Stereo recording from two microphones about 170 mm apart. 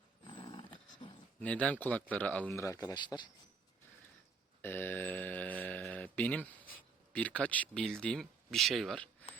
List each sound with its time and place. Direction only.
0.3 s dog: 25° left (ahead or behind)
1.4 s speech: 10° left (ahead or behind); by 3.2 s 25° left (ahead or behind)
4.6 s mantra: 10° left (ahead or behind)
7.1 s speech: 10° left (ahead or behind)